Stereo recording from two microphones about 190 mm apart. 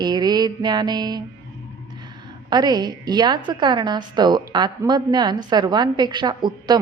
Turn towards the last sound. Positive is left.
turn(degrees=-20)  # may be behind; listen again after turning